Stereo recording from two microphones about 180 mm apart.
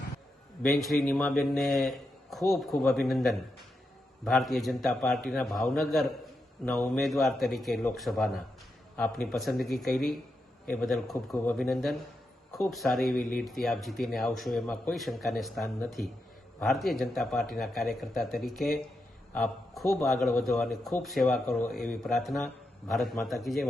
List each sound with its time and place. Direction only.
0.6 s a man's voice: centre (ahead or behind)